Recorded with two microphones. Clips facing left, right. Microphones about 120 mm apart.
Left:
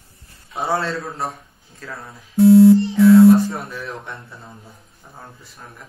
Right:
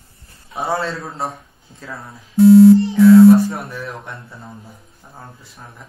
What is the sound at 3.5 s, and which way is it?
Speech, centre (ahead or behind).